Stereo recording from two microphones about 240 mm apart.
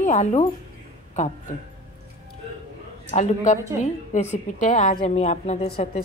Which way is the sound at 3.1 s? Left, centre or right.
Left.